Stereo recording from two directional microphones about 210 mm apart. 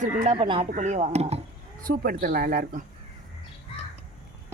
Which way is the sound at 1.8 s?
45° right (ahead or behind).